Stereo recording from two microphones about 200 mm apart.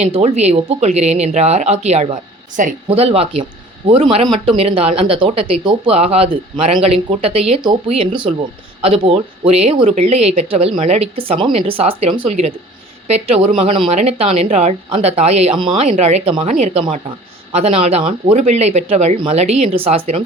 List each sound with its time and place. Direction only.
0.0 s speech: 35° right (ahead or behind)